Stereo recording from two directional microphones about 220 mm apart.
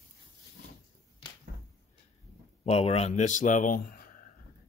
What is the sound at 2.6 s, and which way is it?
Speech, 25° left (ahead or behind).